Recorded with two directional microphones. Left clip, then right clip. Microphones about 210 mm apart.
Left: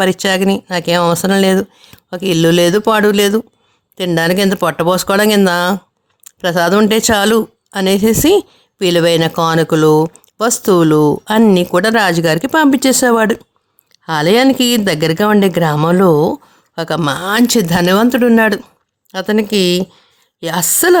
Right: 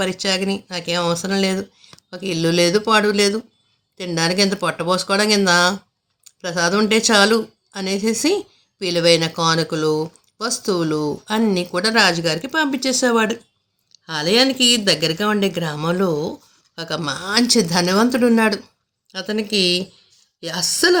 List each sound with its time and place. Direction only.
0.0 s speech: 55° left (ahead or behind)
19.1 s a woman's voice: 55° left (ahead or behind)